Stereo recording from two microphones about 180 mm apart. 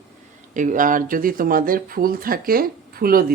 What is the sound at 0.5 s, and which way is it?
Speech, 45° right (ahead or behind).